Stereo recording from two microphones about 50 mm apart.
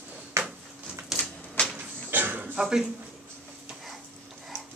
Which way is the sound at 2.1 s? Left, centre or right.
Right.